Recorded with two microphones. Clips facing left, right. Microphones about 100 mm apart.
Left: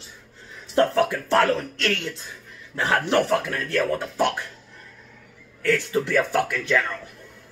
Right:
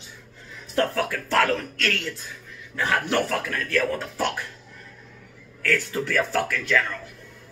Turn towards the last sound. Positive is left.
turn(degrees=20)  # may be behind; listen again after turning